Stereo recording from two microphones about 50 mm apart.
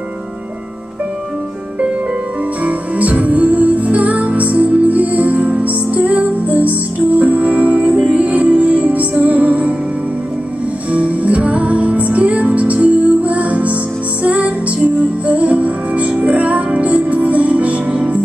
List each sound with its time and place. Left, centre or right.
2.6 s music: right
10.9 s music: right